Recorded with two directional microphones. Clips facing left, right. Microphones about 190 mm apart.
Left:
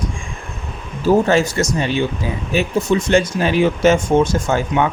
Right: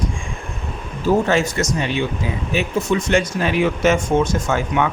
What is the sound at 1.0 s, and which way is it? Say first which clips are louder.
Speech: left 3 dB; 35° left (ahead or behind).